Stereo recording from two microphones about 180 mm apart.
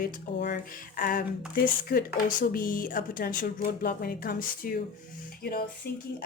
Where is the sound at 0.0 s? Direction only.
60° left (ahead or behind).